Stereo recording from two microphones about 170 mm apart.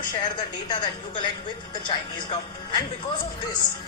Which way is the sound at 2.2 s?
25° left (ahead or behind).